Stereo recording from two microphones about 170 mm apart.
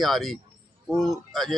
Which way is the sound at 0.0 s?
Centre (ahead or behind).